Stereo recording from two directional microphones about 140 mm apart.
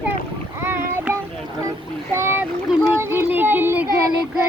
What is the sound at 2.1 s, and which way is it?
Speech, 20° right (ahead or behind).